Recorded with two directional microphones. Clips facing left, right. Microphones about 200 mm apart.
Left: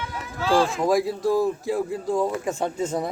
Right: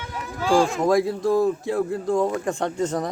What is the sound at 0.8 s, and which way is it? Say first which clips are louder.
Speech: right 1 dB; 5° left (ahead or behind).